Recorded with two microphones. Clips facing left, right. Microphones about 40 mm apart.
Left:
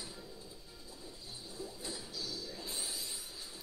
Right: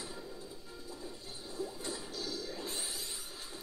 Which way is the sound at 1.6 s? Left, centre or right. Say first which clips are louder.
Right 5 dB; right.